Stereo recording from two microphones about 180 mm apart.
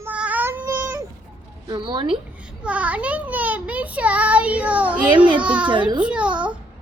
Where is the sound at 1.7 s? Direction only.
25° right (ahead or behind).